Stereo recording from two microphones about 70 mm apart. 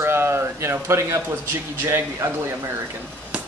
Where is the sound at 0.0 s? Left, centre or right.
Right.